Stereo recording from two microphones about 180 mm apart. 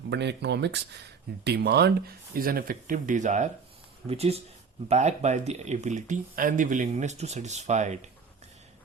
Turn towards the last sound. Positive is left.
turn(degrees=-40)  # may be behind; listen again after turning